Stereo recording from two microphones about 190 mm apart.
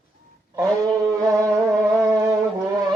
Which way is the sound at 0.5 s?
15° right (ahead or behind).